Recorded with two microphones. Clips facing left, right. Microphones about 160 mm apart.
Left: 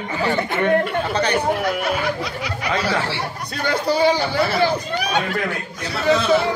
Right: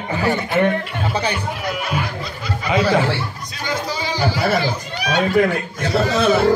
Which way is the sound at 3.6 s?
60° left (ahead or behind).